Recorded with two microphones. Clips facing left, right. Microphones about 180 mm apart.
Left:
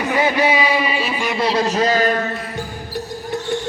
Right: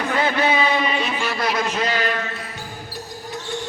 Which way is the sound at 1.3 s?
30° left (ahead or behind).